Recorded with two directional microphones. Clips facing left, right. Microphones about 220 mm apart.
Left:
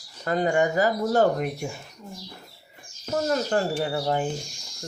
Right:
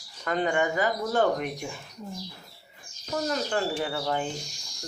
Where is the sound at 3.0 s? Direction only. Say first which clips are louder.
Left 4 dB; 40° left (ahead or behind).